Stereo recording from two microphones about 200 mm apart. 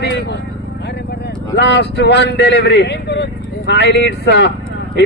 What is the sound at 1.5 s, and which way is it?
A man's voice, 60° left (ahead or behind).